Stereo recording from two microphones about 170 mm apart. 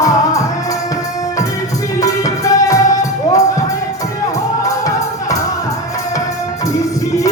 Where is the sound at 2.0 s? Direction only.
20° left (ahead or behind).